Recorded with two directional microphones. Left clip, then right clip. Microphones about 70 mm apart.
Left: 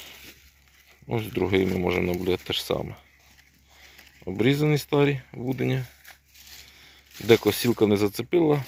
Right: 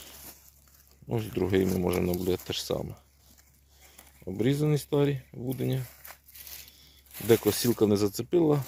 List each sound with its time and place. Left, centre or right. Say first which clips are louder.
0.0 s crushing: left 5 dB; right
1.0 s speech: left 4 dB; right
4.2 s speech: left 5 dB; centre
7.3 s speech: left 2 dB; right